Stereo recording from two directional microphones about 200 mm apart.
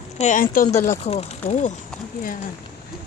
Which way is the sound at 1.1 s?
30° left (ahead or behind).